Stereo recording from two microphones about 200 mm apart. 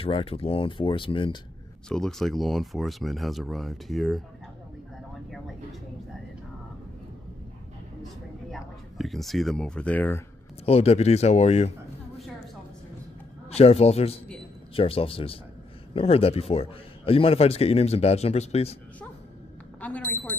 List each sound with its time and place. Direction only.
0.0 s speech: 30° left (ahead or behind)
1.9 s speech: 5° left (ahead or behind)
8.5 s speech: centre (ahead or behind)
10.6 s a man's voice: 30° left (ahead or behind)
13.5 s a man's voice: 30° left (ahead or behind)
19.8 s speech: 5° left (ahead or behind)